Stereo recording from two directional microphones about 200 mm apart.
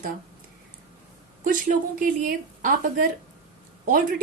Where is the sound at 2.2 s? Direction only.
45° right (ahead or behind).